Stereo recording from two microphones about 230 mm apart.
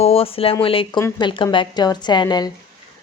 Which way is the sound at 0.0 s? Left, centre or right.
Left.